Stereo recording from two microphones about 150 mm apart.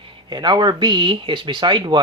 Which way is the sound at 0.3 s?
30° right (ahead or behind).